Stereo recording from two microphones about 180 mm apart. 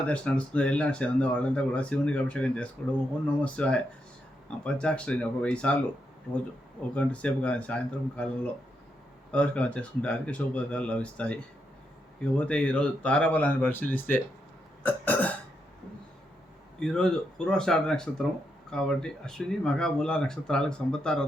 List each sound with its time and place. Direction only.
0.0 s speech: 5° left (ahead or behind)
6.9 s speech: 5° left (ahead or behind)
9.3 s speech: 5° left (ahead or behind)
14.8 s burping: 10° left (ahead or behind)
16.8 s speech: 5° left (ahead or behind)